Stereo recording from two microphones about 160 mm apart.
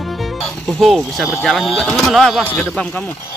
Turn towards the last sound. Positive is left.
turn(degrees=5)  # may be behind; listen again after turning